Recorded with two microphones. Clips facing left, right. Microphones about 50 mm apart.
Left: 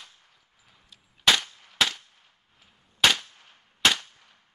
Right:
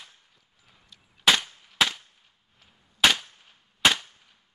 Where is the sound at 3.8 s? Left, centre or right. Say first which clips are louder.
Right 1 dB; centre.